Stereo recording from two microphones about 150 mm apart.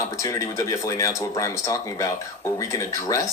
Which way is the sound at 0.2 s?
20° left (ahead or behind).